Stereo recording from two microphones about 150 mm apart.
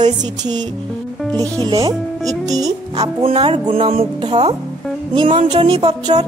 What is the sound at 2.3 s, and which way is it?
Music, 25° right (ahead or behind).